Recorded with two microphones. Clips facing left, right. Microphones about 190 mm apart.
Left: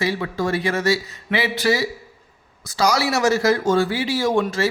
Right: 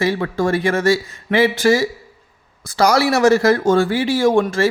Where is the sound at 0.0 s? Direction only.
50° right (ahead or behind).